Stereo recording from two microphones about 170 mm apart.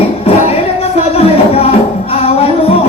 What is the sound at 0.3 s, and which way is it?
Music, 35° left (ahead or behind).